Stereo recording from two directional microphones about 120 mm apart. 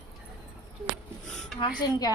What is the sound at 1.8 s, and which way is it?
Speech, 30° left (ahead or behind).